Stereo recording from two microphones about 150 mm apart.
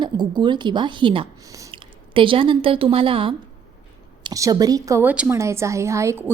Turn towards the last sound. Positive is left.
turn(degrees=-20)  # may be behind; listen again after turning